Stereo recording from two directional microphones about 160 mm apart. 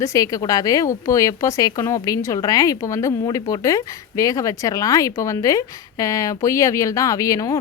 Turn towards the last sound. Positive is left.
turn(degrees=20)  # may be behind; listen again after turning